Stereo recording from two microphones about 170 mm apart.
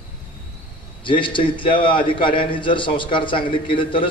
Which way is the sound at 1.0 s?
30° left (ahead or behind).